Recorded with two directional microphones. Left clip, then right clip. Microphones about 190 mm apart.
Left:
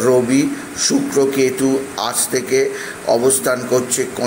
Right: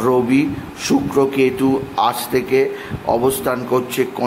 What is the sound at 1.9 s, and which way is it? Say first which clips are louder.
A man's voice: right 3 dB; 10° right (ahead or behind).